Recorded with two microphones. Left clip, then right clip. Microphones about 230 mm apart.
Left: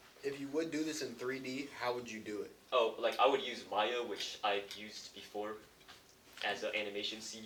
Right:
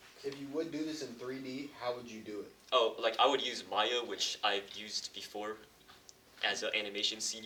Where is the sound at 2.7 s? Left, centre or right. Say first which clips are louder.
Right 2 dB; right.